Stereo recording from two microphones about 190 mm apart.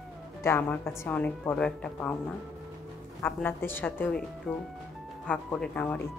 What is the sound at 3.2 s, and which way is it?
Speech, 10° left (ahead or behind).